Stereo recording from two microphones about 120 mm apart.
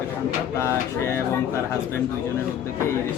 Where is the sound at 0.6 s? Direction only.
20° left (ahead or behind).